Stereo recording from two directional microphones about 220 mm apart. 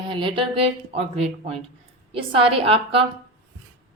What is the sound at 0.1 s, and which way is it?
A woman's voice, 25° right (ahead or behind).